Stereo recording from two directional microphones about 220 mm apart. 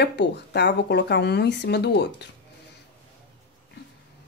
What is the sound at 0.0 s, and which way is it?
Speech, 50° left (ahead or behind).